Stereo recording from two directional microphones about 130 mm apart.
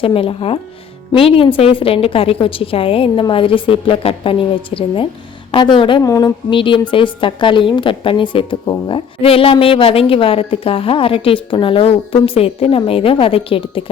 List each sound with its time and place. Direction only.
0.0 s a woman's voice: 45° left (ahead or behind)
6.0 s a sound: 30° left (ahead or behind)
6.5 s a woman's voice: 40° left (ahead or behind)